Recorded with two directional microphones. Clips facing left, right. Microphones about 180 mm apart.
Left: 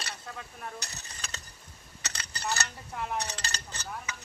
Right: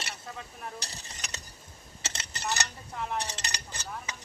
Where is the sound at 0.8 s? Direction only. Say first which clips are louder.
Right 1 dB; 30° right (ahead or behind).